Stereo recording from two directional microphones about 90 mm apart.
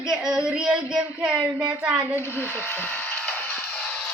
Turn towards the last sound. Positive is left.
turn(degrees=20)  # may be behind; listen again after turning